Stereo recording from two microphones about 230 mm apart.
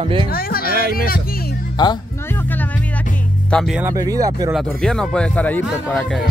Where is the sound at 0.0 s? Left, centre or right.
Right.